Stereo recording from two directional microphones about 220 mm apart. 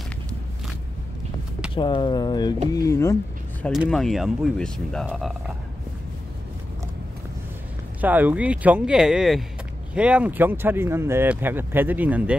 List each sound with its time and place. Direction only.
1.8 s speech: 20° left (ahead or behind)
3.6 s speech: centre (ahead or behind)
8.0 s speech: 10° right (ahead or behind)